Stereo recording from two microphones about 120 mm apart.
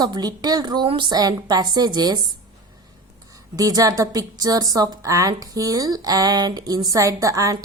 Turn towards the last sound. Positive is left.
turn(degrees=-30)  # may be behind; listen again after turning